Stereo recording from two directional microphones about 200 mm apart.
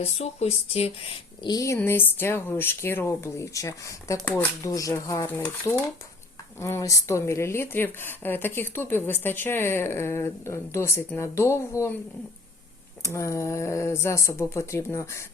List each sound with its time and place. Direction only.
0.0 s speech: 30° left (ahead or behind)
1.5 s speech: 15° left (ahead or behind)
13.0 s speech: 15° left (ahead or behind)